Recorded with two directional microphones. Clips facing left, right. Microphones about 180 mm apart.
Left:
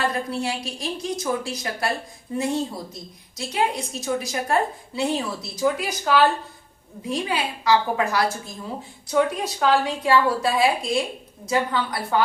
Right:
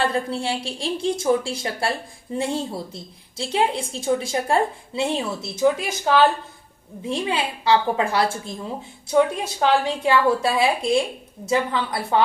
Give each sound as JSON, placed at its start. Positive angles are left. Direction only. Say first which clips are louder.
{"t": 0.0, "sound": "a woman's voice", "louder": "right 2 dB", "side_deg": -30}